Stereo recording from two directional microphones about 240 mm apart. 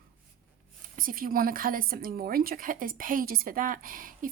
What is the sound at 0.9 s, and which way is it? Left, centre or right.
Speech, right.